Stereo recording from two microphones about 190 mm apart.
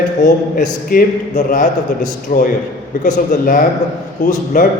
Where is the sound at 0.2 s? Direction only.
40° left (ahead or behind).